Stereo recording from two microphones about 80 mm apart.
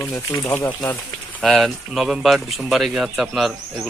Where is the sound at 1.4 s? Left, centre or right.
Centre.